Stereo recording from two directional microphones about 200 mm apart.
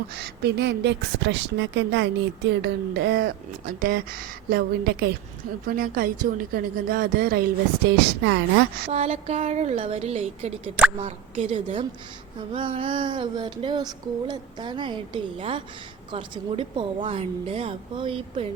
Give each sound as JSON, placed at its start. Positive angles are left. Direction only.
{"t": 0.2, "sound": "a woman's voice", "side_deg": -60}
{"t": 2.6, "sound": "a woman's voice", "side_deg": -50}
{"t": 8.9, "sound": "a woman's voice", "side_deg": -30}
{"t": 11.0, "sound": "a sound", "side_deg": -30}